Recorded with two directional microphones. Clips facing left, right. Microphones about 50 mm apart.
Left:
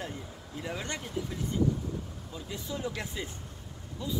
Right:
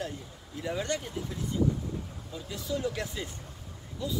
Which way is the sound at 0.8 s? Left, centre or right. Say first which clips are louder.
Right 2 dB; left.